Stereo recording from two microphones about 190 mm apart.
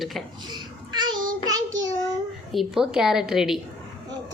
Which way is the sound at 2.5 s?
Centre (ahead or behind).